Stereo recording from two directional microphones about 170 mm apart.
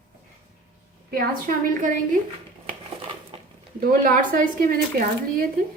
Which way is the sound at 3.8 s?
55° right (ahead or behind).